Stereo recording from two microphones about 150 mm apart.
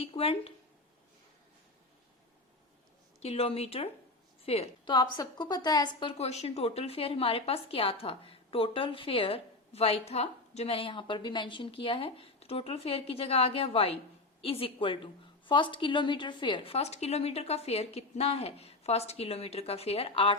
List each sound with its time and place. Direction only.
0.0 s a woman's voice: 40° left (ahead or behind)
3.2 s a woman's voice: 40° left (ahead or behind)
4.9 s a woman's voice: 30° left (ahead or behind)